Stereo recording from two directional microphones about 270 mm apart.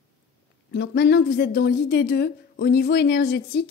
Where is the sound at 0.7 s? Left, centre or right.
Left.